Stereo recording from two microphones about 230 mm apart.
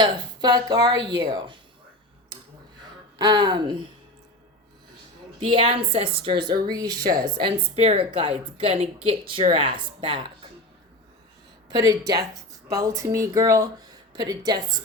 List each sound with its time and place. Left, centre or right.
0.0 s a woman's voice: centre
3.2 s speech: centre
5.4 s a woman's voice: right
11.7 s speech: centre